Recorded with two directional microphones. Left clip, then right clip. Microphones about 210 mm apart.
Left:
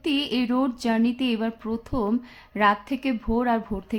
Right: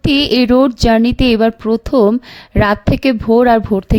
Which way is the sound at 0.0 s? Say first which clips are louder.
Right 13 dB; 45° right (ahead or behind).